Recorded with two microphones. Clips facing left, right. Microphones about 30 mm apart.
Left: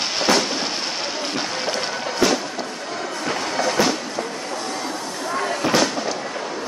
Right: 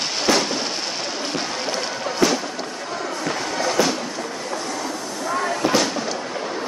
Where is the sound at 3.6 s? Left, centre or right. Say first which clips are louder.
Even; left.